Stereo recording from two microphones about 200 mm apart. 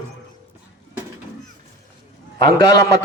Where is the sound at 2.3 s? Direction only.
20° left (ahead or behind).